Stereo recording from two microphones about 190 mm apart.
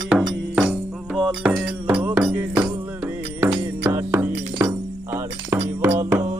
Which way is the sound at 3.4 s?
10° right (ahead or behind).